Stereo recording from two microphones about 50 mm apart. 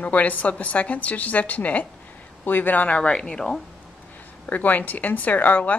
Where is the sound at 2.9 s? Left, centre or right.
Left.